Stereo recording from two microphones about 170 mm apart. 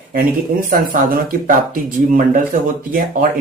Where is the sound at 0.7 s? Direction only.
55° right (ahead or behind).